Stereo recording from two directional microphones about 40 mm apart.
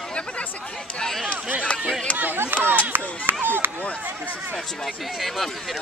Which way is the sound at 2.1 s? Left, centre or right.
Right.